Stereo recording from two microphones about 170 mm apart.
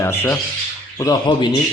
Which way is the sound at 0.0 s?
15° left (ahead or behind).